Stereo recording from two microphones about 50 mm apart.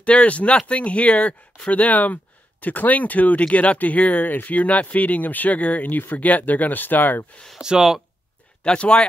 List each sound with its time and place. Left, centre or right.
0.0 s speech: left
7.6 s speech: centre
8.6 s speech: left